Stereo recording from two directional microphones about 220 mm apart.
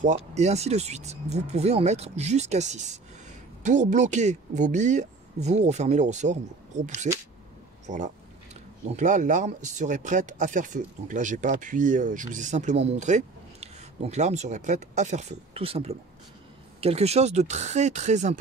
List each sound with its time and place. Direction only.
0.0 s speech: 30° right (ahead or behind)